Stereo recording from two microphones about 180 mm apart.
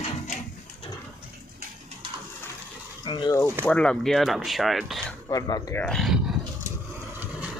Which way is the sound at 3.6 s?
5° left (ahead or behind).